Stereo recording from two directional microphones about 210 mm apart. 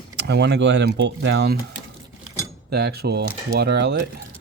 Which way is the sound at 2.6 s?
50° right (ahead or behind).